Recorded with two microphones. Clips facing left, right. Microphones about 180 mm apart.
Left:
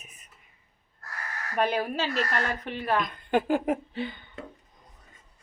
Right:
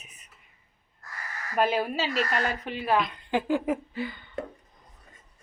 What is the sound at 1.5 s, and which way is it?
Speech, 5° right (ahead or behind).